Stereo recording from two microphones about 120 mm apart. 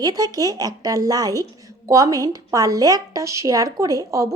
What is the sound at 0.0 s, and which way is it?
Speech, 30° right (ahead or behind).